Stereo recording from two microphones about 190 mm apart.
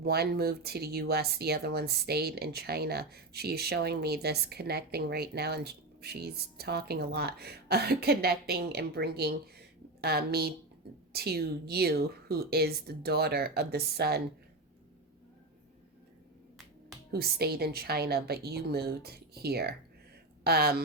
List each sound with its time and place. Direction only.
0.0 s speech: 55° right (ahead or behind)
17.1 s speech: 55° right (ahead or behind)